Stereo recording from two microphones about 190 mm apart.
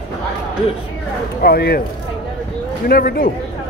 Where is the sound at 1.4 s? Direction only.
55° left (ahead or behind).